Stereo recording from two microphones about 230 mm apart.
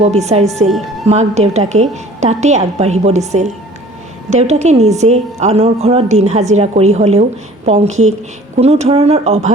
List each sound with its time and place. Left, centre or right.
0.0 s a woman's voice: right